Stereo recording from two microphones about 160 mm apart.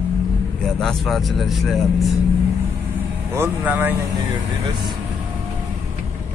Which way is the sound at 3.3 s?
10° right (ahead or behind).